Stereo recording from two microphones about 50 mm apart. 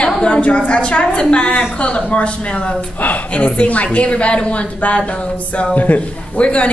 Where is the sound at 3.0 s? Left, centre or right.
Left.